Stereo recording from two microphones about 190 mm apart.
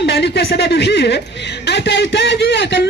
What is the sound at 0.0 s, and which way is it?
A woman's voice, 65° left (ahead or behind).